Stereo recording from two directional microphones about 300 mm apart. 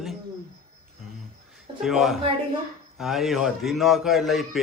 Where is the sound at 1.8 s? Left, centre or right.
Centre.